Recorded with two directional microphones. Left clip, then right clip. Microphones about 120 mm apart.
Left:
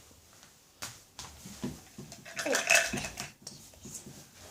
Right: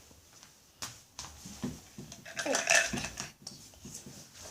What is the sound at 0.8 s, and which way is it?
Finger snapping, 30° right (ahead or behind).